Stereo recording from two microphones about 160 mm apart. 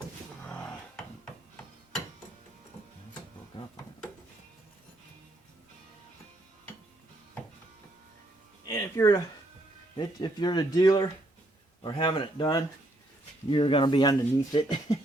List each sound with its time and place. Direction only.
0.4 s dishes: 10° left (ahead or behind)
8.6 s speech: 20° left (ahead or behind)